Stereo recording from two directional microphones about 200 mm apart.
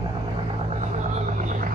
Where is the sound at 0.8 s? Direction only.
40° right (ahead or behind).